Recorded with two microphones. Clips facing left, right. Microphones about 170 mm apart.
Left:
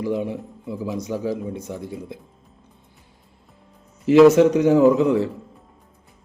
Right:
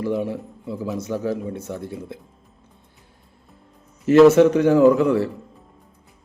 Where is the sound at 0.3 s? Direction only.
15° left (ahead or behind).